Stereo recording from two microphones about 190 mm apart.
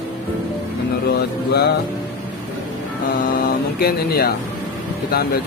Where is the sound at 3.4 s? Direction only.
55° left (ahead or behind).